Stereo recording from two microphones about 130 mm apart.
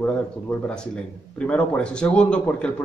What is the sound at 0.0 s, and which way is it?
Speech, 10° left (ahead or behind).